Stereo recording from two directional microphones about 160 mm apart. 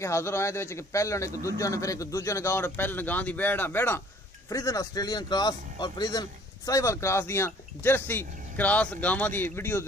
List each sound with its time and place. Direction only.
0.0 s speech: 15° left (ahead or behind)